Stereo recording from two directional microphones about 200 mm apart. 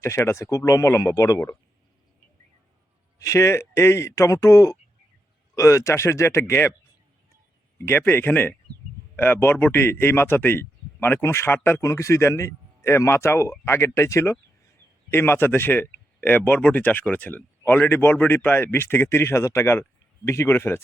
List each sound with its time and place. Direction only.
0.0 s speech: 15° left (ahead or behind)
3.2 s speech: 15° left (ahead or behind)
7.8 s speech: 10° left (ahead or behind)